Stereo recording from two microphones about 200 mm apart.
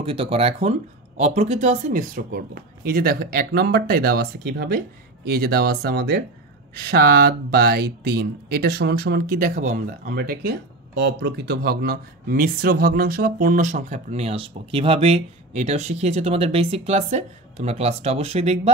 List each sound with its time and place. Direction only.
0.0 s speech: 30° right (ahead or behind)